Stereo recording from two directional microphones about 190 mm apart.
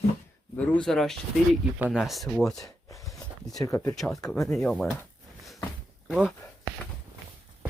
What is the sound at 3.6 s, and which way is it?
Speech, 15° left (ahead or behind).